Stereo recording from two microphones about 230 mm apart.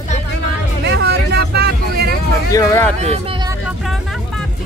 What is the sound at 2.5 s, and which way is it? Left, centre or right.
Speech, centre.